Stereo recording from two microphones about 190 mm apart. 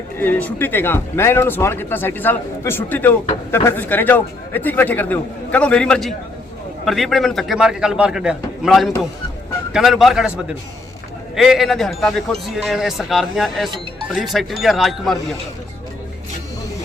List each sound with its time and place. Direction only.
0.2 s speech: 10° left (ahead or behind)
11.3 s speech: centre (ahead or behind)
13.7 s speech: 25° right (ahead or behind)
14.1 s speech: centre (ahead or behind)